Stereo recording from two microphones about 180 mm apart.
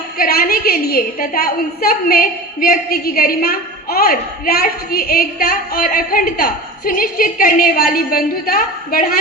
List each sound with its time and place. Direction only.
0.2 s a woman's voice: 55° left (ahead or behind)